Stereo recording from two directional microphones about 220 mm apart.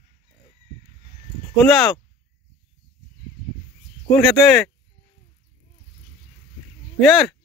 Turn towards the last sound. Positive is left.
turn(degrees=0)  # may be behind; listen again after turning